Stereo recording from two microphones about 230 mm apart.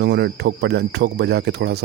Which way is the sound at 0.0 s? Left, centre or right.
Right.